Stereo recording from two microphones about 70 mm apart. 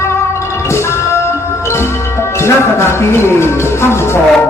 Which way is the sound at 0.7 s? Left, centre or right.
Left.